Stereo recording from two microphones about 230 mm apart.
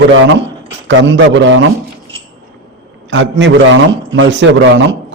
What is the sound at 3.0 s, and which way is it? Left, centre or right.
A man's voice, right.